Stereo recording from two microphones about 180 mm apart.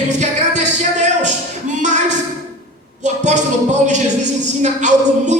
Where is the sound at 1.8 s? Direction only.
40° right (ahead or behind).